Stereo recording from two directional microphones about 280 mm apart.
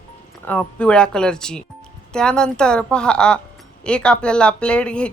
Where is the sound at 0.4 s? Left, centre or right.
Centre.